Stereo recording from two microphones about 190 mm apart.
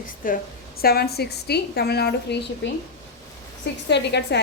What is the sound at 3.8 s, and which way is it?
Speech, 60° left (ahead or behind).